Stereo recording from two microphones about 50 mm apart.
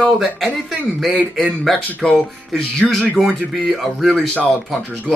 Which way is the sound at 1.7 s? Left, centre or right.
Centre.